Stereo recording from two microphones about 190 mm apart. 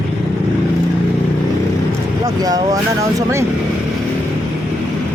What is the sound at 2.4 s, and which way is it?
Speech, 20° right (ahead or behind).